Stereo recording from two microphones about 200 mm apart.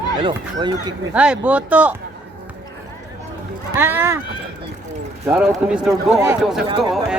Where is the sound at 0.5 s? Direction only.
20° right (ahead or behind).